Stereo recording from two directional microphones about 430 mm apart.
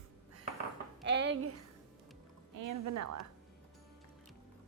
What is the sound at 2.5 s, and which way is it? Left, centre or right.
Speech, right.